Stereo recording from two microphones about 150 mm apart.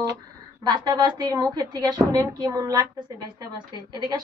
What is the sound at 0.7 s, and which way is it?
A woman's voice, 30° right (ahead or behind).